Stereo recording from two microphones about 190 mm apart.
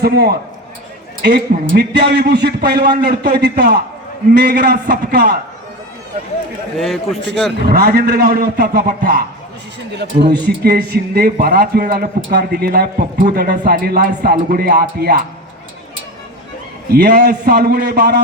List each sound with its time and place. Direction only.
0.0 s a man's voice: 55° right (ahead or behind)
6.7 s a man's voice: centre (ahead or behind)
7.5 s a man's voice: 55° right (ahead or behind)
16.9 s a man's voice: 60° right (ahead or behind)